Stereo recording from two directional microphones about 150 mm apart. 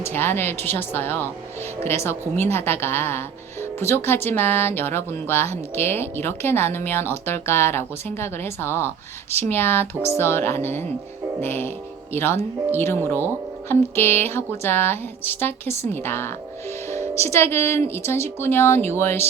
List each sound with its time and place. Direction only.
0.0 s a woman's voice: 15° left (ahead or behind)